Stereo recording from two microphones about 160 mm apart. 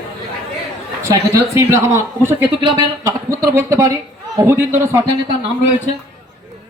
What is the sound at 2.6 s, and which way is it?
Speech, 30° right (ahead or behind).